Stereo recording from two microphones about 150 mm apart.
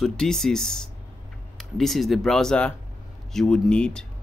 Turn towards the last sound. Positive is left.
turn(degrees=5)  # may be behind; listen again after turning